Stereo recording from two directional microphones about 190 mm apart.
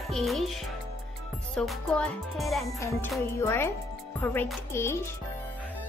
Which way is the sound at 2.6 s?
15° left (ahead or behind).